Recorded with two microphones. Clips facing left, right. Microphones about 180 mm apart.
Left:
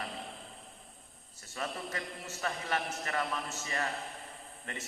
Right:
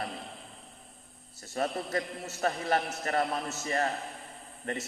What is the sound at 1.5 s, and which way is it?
A man's voice, 40° right (ahead or behind).